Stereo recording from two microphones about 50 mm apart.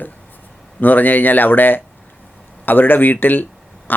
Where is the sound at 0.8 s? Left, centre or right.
Left.